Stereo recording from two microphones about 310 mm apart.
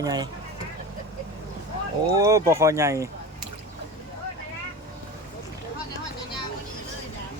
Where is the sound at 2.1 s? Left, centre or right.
Centre.